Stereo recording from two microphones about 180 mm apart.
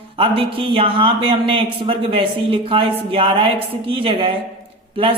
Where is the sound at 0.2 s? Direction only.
30° right (ahead or behind).